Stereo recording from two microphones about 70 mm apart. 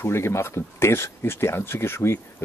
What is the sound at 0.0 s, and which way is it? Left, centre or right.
Speech, left.